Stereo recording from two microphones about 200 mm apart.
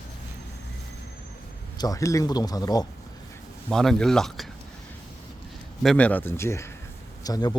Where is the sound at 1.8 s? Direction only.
15° left (ahead or behind).